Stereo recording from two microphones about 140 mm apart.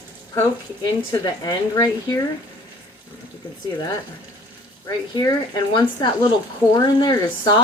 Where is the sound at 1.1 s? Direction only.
25° left (ahead or behind).